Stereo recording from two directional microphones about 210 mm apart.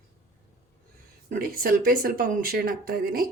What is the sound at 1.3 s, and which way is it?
Speech, 45° right (ahead or behind).